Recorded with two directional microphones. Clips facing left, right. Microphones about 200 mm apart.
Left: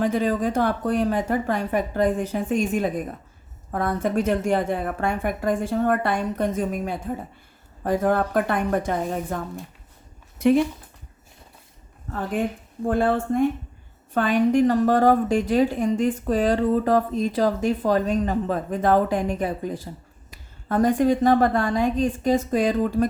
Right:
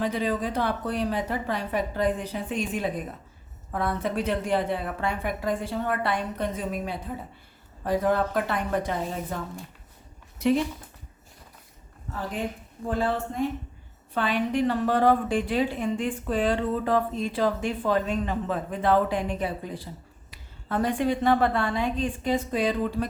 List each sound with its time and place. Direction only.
0.0 s a woman's voice: 45° left (ahead or behind)
12.9 s a woman's voice: 55° left (ahead or behind)